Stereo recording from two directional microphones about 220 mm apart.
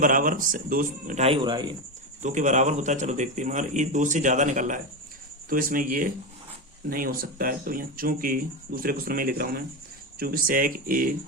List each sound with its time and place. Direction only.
0.0 s speech: 40° right (ahead or behind); by 1.7 s 20° right (ahead or behind)
2.2 s speech: 35° right (ahead or behind)